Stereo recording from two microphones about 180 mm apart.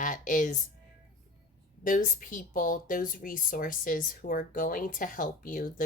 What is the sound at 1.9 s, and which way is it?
Speech, 50° left (ahead or behind).